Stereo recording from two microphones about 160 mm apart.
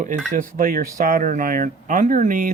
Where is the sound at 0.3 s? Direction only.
60° right (ahead or behind).